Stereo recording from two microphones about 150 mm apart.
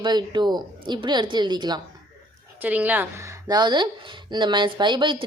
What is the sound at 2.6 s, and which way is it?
A woman's voice, 10° right (ahead or behind).